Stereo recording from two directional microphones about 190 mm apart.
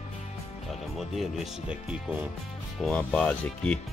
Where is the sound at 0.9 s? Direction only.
Centre (ahead or behind).